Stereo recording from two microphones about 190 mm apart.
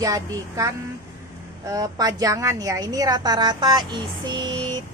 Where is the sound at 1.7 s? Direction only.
20° right (ahead or behind).